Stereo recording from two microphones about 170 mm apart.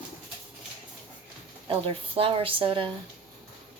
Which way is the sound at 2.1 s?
35° right (ahead or behind).